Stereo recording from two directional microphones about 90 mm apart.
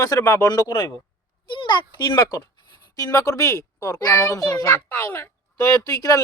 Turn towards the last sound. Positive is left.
turn(degrees=40)  # may be behind; listen again after turning